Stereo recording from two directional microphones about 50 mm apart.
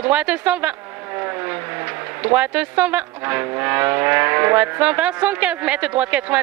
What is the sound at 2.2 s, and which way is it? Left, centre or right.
Speech, right.